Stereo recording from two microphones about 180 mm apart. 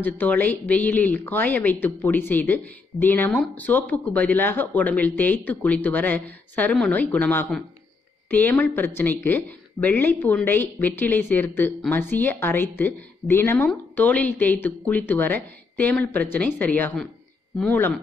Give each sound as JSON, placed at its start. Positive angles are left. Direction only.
{"t": 0.0, "sound": "speech", "side_deg": 10}